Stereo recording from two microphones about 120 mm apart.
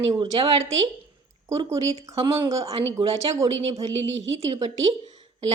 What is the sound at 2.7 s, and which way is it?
Speech, 55° right (ahead or behind).